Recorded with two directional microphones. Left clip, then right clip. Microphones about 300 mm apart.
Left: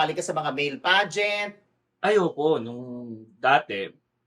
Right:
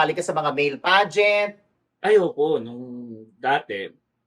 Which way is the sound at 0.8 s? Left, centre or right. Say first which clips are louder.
Right 3 dB; right.